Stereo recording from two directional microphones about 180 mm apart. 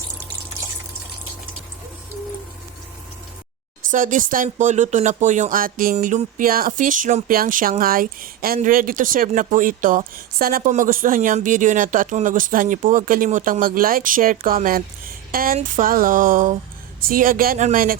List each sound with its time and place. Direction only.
3.9 s speech: 45° right (ahead or behind)